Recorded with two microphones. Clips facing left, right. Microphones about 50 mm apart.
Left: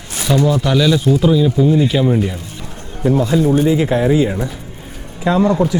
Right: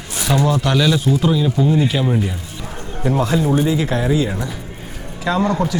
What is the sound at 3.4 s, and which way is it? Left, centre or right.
Speech, centre.